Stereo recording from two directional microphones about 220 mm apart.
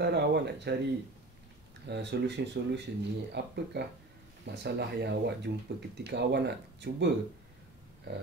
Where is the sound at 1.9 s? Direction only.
50° right (ahead or behind).